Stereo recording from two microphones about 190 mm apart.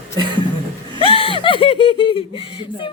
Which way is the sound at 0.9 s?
30° left (ahead or behind).